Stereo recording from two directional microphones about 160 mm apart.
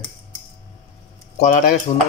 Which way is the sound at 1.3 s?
55° left (ahead or behind).